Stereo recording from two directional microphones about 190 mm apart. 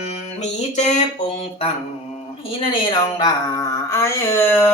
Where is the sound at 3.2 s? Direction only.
20° left (ahead or behind).